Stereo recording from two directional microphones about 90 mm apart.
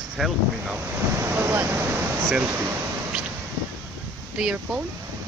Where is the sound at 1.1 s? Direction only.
30° right (ahead or behind).